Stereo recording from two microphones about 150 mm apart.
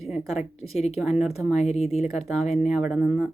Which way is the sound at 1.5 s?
45° left (ahead or behind).